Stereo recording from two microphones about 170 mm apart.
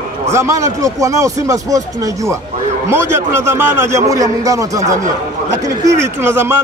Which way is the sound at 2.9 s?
15° right (ahead or behind).